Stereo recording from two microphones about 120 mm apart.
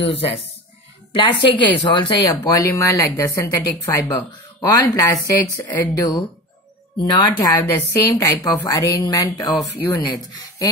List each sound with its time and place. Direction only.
0.1 s a woman's voice: 55° left (ahead or behind)
2.2 s speech: 25° left (ahead or behind)